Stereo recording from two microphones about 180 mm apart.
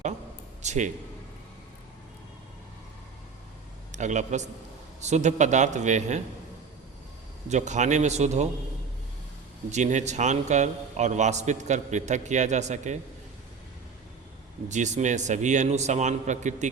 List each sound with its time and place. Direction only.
0.6 s a man's voice: 40° right (ahead or behind)
3.9 s a man's voice: 40° right (ahead or behind)
7.5 s a man's voice: 40° right (ahead or behind)
9.7 s a man's voice: 40° right (ahead or behind)
14.7 s a man's voice: 40° right (ahead or behind)